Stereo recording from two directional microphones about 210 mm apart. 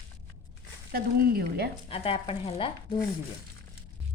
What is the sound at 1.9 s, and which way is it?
Stir, 25° left (ahead or behind).